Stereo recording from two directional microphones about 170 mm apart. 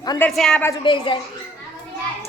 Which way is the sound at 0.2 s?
5° left (ahead or behind).